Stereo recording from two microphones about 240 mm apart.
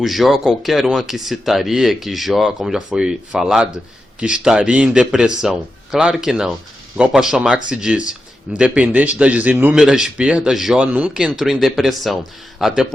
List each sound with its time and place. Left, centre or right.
0.0 s a man's voice: centre